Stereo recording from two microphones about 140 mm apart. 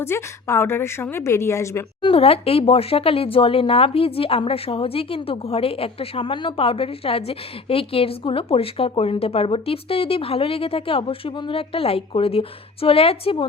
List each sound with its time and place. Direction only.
0.0 s a woman's voice: 20° left (ahead or behind)
2.0 s speech: 40° left (ahead or behind)